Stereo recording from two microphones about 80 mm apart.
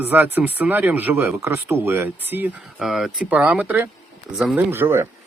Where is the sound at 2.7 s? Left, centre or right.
Centre.